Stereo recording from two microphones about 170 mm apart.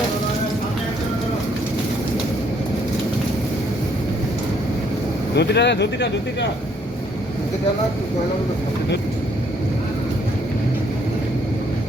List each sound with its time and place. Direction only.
5.3 s speech: 85° left